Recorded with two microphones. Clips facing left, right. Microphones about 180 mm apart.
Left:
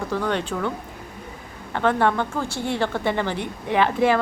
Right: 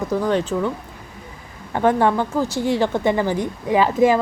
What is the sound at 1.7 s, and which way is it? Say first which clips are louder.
Speech: right 3 dB; 15° right (ahead or behind).